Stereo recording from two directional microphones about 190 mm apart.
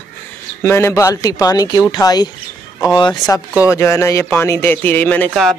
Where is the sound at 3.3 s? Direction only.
5° right (ahead or behind).